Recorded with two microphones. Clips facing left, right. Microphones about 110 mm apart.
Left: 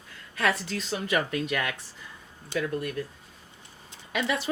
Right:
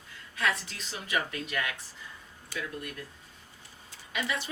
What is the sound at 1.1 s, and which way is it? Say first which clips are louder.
Speech: left 4 dB; 70° left (ahead or behind).